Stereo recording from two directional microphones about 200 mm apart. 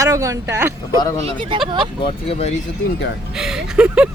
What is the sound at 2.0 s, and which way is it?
Speech, 30° left (ahead or behind).